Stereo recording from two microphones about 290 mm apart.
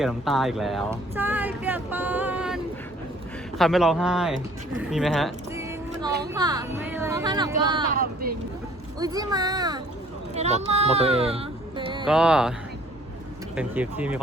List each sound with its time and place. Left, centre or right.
0.0 s speech: centre
3.6 s speech: centre
6.3 s speech: centre
7.9 s speech: right
9.0 s speech: centre
12.0 s speech: centre
13.6 s speech: centre